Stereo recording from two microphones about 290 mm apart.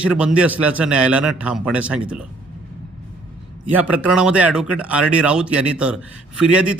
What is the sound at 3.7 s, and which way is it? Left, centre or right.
A man's voice, centre.